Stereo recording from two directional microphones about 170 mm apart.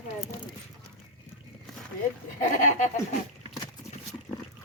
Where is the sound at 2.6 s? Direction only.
50° left (ahead or behind).